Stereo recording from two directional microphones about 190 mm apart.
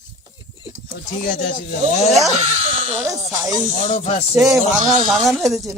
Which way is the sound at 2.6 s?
45° right (ahead or behind).